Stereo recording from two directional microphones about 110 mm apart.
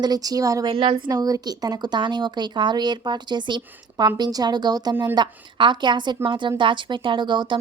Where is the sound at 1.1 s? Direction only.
35° right (ahead or behind).